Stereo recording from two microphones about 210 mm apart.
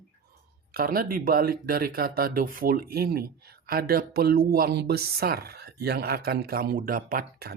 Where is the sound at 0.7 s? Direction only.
45° right (ahead or behind).